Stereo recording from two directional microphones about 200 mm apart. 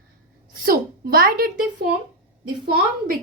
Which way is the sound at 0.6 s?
45° right (ahead or behind).